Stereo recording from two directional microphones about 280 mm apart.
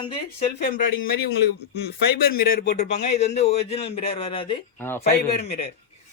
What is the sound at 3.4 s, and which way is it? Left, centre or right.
Speech, left.